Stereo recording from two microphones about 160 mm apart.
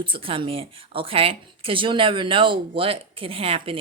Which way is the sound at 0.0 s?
35° right (ahead or behind).